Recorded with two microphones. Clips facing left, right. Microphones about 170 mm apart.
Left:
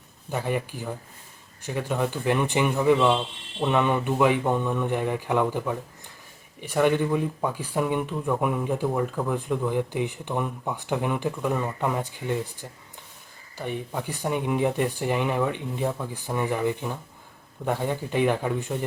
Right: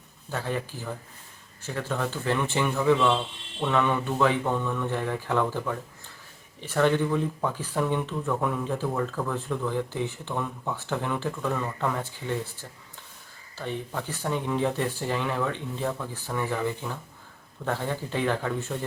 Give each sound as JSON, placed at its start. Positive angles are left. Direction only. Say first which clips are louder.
{"t": 0.3, "sound": "speech", "louder": "left 3 dB", "side_deg": 15}
{"t": 13.6, "sound": "speech", "louder": "left 2 dB", "side_deg": 15}